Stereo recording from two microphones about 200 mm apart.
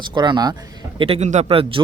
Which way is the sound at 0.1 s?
20° right (ahead or behind).